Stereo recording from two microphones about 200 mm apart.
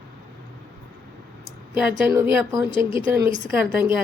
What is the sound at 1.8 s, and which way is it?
Speech, 10° right (ahead or behind).